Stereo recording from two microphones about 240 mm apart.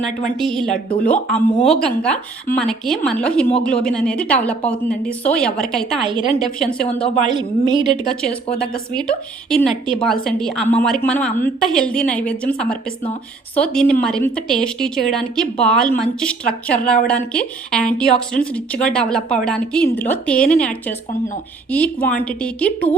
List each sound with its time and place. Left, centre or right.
0.3 s a woman's voice: centre
7.3 s a woman's voice: centre
8.0 s a woman's voice: centre
9.5 s a woman's voice: centre